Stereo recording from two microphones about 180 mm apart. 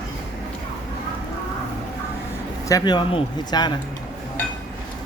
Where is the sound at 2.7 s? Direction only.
20° left (ahead or behind).